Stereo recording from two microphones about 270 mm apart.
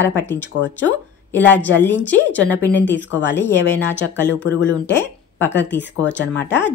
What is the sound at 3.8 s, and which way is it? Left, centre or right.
Speech, centre.